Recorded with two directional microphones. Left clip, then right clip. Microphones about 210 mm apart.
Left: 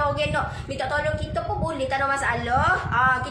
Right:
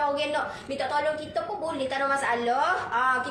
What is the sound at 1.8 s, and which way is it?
A woman's voice, 15° left (ahead or behind).